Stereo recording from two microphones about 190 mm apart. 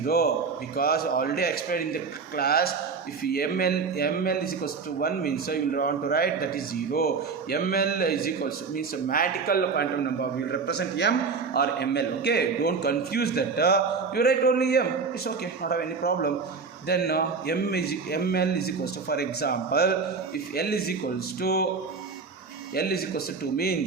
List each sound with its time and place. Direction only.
0.0 s a man's voice: 55° left (ahead or behind)
7.5 s a man's voice: 55° left (ahead or behind)
22.7 s speech: 55° left (ahead or behind)